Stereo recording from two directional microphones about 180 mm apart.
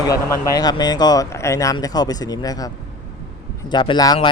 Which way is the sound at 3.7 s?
25° left (ahead or behind).